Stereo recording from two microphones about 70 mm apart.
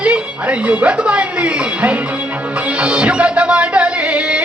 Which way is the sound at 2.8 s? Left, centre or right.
Centre.